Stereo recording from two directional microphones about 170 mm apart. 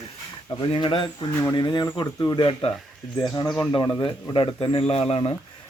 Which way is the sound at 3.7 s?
25° left (ahead or behind).